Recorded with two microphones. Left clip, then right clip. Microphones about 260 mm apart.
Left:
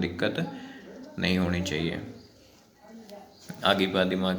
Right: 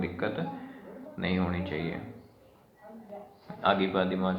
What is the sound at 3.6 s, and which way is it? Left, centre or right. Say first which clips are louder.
Speech: left 2 dB; left.